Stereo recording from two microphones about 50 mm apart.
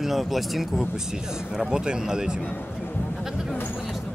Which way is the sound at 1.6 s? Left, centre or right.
Centre.